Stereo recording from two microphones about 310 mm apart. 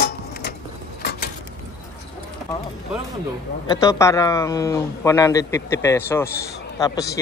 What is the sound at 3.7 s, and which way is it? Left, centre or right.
A man's voice, centre.